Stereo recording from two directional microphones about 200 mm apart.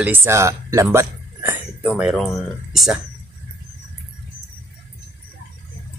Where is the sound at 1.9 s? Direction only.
Centre (ahead or behind).